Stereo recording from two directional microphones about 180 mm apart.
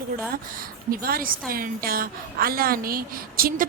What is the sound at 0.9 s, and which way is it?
A woman's voice, 55° right (ahead or behind).